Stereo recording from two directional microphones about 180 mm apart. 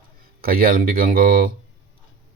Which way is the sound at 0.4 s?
55° right (ahead or behind).